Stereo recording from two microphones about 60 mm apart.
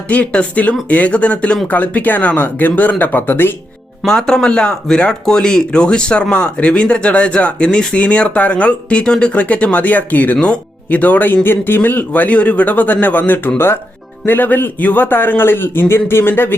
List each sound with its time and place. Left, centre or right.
0.1 s a man's voice: left
4.0 s a man's voice: centre; by 16.6 s left